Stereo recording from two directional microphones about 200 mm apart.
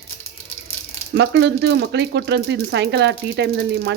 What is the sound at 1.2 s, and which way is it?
Speech, 55° right (ahead or behind).